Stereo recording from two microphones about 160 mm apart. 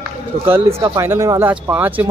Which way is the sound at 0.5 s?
15° right (ahead or behind).